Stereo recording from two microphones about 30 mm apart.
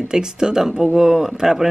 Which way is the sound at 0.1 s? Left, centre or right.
Right.